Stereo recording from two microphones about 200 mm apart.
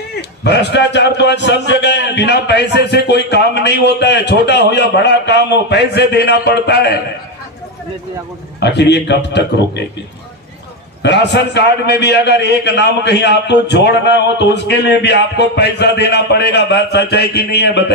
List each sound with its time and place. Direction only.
0.4 s a man's voice: 55° left (ahead or behind)
8.5 s a man's voice: 60° left (ahead or behind)
11.0 s a man's voice: 60° left (ahead or behind)